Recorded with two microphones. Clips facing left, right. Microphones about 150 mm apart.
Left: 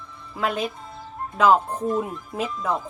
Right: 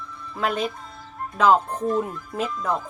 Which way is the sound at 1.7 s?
25° left (ahead or behind).